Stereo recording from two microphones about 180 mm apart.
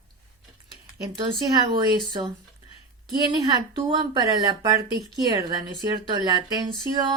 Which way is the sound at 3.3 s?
25° right (ahead or behind).